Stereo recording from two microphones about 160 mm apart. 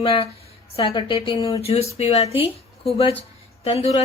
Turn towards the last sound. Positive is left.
turn(degrees=40)  # may be behind; listen again after turning